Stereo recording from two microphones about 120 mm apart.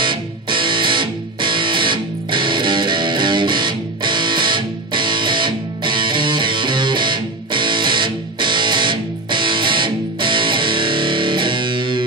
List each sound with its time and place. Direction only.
0.0 s music: 45° right (ahead or behind)